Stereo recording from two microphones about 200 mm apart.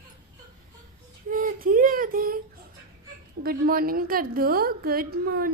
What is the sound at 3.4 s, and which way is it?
A woman's voice, 50° right (ahead or behind).